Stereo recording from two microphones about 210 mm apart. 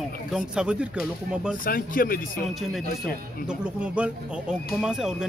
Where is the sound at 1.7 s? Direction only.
45° left (ahead or behind).